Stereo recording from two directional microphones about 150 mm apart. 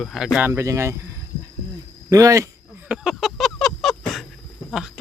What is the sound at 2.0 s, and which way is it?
Speech, 20° right (ahead or behind).